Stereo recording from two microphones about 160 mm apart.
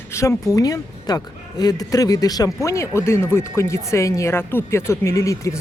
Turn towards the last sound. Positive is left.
turn(degrees=20)  # may be behind; listen again after turning